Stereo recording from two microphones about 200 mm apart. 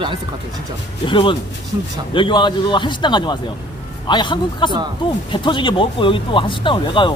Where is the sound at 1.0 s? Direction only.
25° left (ahead or behind).